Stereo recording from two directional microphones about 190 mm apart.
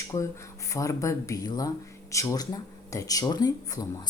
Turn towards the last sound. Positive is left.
turn(degrees=20)  # may be behind; listen again after turning